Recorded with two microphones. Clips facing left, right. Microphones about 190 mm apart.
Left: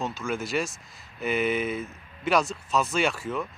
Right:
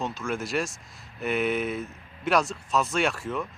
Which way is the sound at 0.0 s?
Centre (ahead or behind).